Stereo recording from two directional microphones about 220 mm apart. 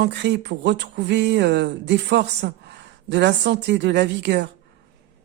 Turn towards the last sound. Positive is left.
turn(degrees=-50)  # may be behind; listen again after turning